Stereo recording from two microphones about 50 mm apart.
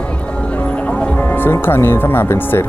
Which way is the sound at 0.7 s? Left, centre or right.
Left.